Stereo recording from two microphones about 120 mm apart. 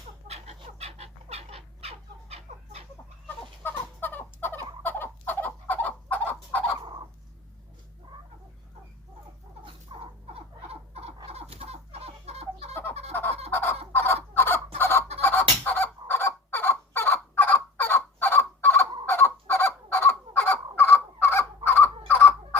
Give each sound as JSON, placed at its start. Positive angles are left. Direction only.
{"t": 0.3, "sound": "chicken", "side_deg": -60}
{"t": 3.6, "sound": "fowl", "side_deg": 15}
{"t": 9.9, "sound": "rodents", "side_deg": -45}
{"t": 10.2, "sound": "a sound", "side_deg": -60}
{"t": 11.3, "sound": "chicken", "side_deg": -60}
{"t": 12.9, "sound": "a sound", "side_deg": -60}
{"t": 13.5, "sound": "fowl", "side_deg": 20}